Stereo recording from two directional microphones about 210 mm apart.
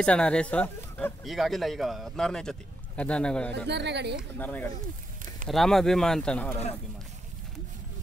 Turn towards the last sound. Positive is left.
turn(degrees=5)  # may be behind; listen again after turning